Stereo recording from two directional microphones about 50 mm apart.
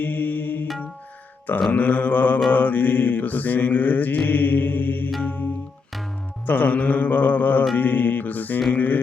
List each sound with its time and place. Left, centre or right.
0.0 s music: left
1.7 s mantra: left
6.4 s mantra: left